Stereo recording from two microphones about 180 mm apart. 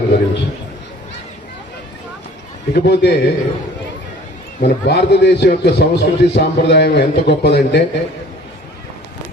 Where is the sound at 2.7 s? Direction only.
70° left (ahead or behind).